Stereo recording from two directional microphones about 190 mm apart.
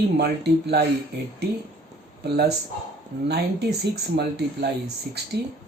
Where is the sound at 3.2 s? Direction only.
60° right (ahead or behind).